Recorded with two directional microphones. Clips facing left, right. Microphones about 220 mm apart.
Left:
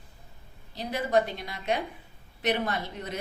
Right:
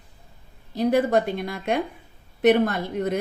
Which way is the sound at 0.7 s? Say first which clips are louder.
Right 7 dB; 50° right (ahead or behind).